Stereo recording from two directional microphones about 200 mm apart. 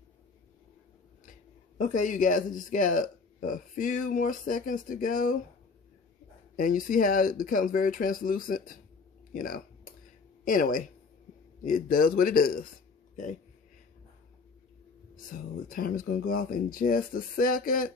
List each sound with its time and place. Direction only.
1.8 s speech: 40° left (ahead or behind)
6.5 s speech: 45° left (ahead or behind)
9.3 s a sound: 45° left (ahead or behind)
10.4 s speech: 45° left (ahead or behind)
15.2 s speech: 45° left (ahead or behind)